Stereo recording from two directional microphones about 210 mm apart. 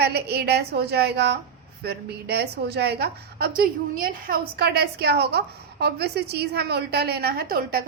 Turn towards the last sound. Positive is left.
turn(degrees=-45)  # may be behind; listen again after turning